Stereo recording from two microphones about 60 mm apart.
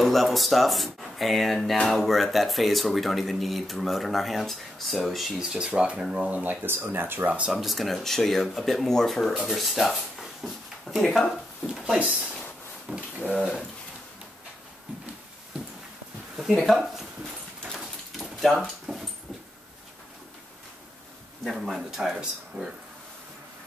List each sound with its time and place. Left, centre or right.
0.0 s speech: centre
6.3 s speech: right
7.5 s speech: centre
9.5 s a sound: centre
11.1 s speech: centre
11.6 s speech: centre
12.9 s speech: centre
16.3 s speech: centre
17.6 s dog: centre
21.5 s speech: centre